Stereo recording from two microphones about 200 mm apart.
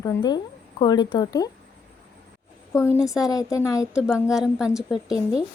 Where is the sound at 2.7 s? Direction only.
15° left (ahead or behind).